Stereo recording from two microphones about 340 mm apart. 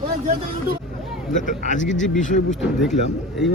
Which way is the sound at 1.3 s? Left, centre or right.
Left.